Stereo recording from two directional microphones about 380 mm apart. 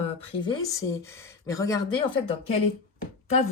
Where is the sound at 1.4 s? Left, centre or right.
Centre.